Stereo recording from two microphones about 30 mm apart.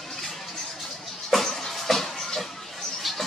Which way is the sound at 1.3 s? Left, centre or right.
Centre.